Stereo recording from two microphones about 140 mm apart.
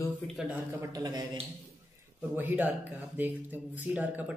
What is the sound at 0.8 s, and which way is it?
Speech, 25° right (ahead or behind).